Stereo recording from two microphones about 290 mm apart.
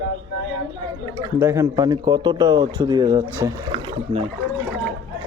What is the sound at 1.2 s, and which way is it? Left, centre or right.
Speech, centre.